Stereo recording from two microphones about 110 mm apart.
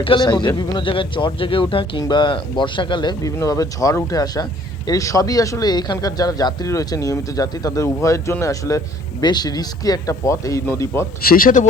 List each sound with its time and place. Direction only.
0.0 s speech: 45° left (ahead or behind)
3.3 s speech: 30° left (ahead or behind)
9.2 s speech: 40° left (ahead or behind)